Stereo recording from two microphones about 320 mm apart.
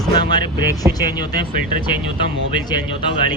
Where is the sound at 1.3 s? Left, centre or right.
Right.